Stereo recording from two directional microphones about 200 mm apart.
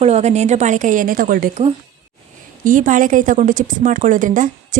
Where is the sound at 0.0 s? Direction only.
35° right (ahead or behind).